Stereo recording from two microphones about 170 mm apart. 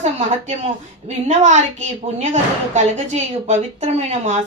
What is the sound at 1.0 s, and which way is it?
A woman's voice, 45° right (ahead or behind).